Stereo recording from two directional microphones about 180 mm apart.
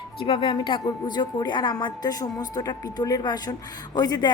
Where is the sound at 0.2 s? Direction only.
30° left (ahead or behind).